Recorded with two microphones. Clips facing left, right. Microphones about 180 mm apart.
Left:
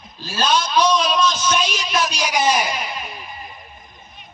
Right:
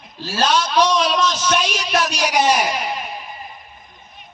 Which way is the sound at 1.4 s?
65° right (ahead or behind).